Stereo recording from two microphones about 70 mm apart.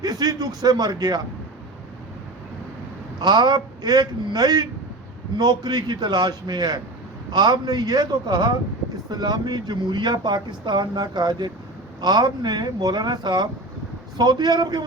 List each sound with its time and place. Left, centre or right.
0.0 s a man's voice: right
3.2 s speech: right
5.4 s a man's voice: right
11.9 s speech: right